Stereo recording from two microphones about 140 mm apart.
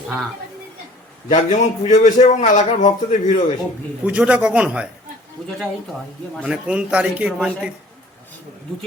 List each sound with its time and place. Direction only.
1.3 s a man's voice: 55° left (ahead or behind)
4.0 s speech: 10° right (ahead or behind)
6.4 s speech: 10° right (ahead or behind)